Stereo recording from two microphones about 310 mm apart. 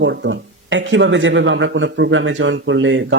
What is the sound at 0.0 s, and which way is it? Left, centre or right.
Speech, right.